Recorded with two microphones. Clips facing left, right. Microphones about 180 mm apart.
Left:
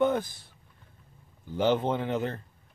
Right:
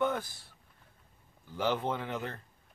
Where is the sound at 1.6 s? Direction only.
25° left (ahead or behind).